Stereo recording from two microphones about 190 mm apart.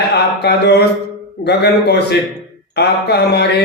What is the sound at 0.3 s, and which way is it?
Speech, 60° left (ahead or behind).